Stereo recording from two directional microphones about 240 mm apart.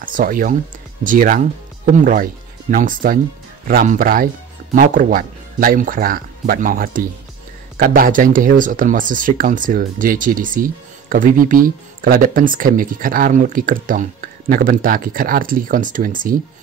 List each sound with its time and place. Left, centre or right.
0.0 s speech: right